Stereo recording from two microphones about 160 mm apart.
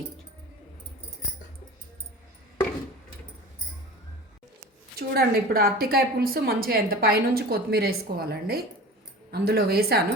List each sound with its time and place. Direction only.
4.9 s a woman's voice: 75° right (ahead or behind)